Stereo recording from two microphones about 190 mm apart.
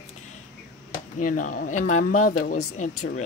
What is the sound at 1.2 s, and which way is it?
Speech, 45° left (ahead or behind).